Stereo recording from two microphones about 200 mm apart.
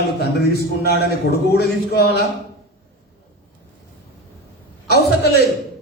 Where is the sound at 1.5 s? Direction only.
55° left (ahead or behind).